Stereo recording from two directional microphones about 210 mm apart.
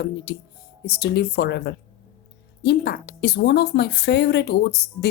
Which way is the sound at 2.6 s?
50° left (ahead or behind).